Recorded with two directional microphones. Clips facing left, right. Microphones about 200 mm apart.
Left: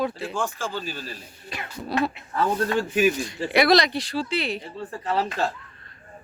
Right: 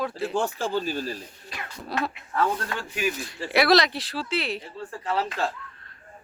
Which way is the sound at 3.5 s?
Centre (ahead or behind).